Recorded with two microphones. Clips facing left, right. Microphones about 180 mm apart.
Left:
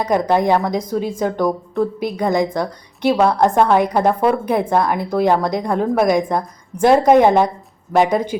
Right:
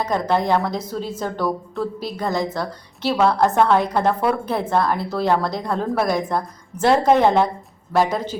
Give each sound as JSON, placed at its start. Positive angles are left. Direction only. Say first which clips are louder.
{"t": 0.0, "sound": "a woman's voice", "louder": "left 4 dB", "side_deg": 15}